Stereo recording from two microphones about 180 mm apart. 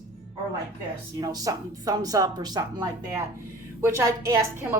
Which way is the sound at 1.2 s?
20° right (ahead or behind).